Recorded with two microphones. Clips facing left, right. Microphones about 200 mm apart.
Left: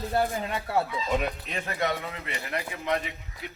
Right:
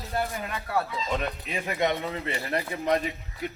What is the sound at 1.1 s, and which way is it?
Speech, 15° left (ahead or behind).